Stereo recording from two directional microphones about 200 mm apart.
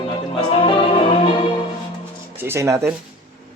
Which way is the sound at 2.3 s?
10° right (ahead or behind).